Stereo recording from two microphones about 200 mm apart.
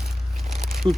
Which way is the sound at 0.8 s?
25° right (ahead or behind).